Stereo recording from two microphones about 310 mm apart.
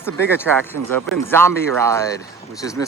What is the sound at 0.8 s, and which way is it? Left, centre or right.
Speech, right.